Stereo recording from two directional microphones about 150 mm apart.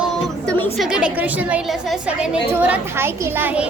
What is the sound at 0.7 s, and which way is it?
A woman's voice, 5° right (ahead or behind).